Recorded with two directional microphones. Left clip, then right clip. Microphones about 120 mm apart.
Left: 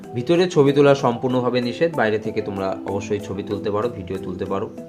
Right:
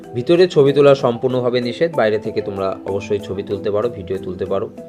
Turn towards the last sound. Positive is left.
turn(degrees=-35)  # may be behind; listen again after turning